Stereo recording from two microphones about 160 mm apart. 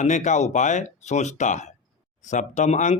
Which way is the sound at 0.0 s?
50° left (ahead or behind).